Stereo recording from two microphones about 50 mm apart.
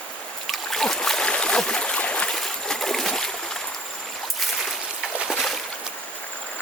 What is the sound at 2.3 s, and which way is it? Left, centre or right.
Water, centre.